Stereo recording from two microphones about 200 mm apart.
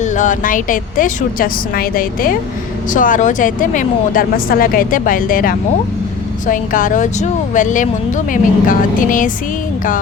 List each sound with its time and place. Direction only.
0.0 s speech: 40° left (ahead or behind)